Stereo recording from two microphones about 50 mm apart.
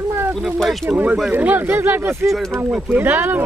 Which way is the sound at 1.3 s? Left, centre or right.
Right.